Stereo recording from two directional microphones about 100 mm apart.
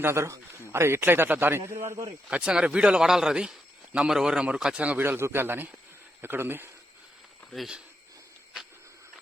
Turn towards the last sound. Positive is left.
turn(degrees=-5)  # may be behind; listen again after turning